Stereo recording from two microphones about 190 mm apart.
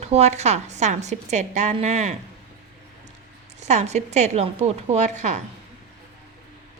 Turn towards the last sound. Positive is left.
turn(degrees=-40)  # may be behind; listen again after turning